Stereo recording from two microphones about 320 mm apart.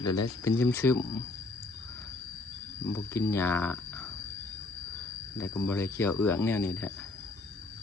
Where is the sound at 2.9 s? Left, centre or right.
Centre.